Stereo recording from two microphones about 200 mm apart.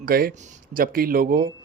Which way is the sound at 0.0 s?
50° right (ahead or behind).